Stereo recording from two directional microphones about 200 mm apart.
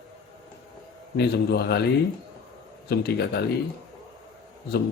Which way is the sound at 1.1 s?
55° left (ahead or behind).